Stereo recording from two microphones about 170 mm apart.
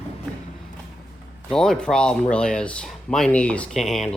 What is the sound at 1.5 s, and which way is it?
Speech, 5° left (ahead or behind).